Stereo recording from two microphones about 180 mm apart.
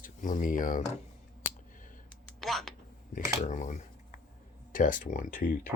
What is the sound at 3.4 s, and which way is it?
Speech, 45° left (ahead or behind).